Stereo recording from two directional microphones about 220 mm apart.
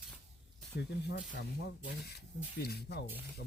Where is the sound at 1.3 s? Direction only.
50° left (ahead or behind).